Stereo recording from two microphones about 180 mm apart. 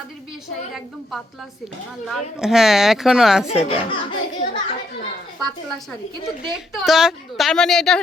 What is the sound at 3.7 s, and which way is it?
Speech, 30° left (ahead or behind).